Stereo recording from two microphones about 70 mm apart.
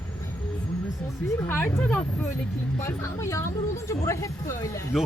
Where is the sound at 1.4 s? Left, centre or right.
Left.